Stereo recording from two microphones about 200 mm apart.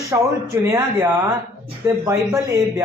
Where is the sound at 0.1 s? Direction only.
15° right (ahead or behind).